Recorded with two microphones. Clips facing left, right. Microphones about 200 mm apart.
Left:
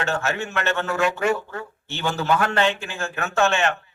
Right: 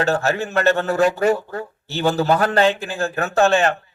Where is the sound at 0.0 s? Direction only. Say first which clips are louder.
Right 5 dB; 35° right (ahead or behind).